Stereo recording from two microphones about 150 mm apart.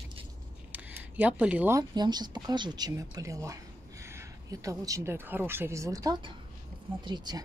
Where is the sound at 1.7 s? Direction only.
30° right (ahead or behind).